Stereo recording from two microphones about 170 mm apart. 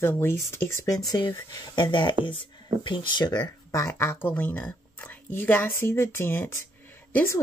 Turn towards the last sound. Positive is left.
turn(degrees=10)  # may be behind; listen again after turning